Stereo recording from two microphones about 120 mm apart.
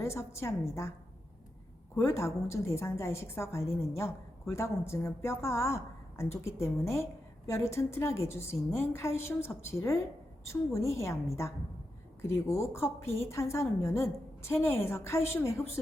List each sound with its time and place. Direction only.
0.0 s a woman's voice: 25° left (ahead or behind)
2.0 s a woman's voice: 25° left (ahead or behind)